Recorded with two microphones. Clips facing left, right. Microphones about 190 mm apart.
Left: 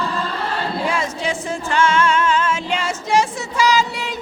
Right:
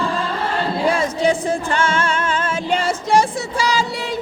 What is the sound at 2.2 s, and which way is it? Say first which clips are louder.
Music: left 3 dB; 50° right (ahead or behind).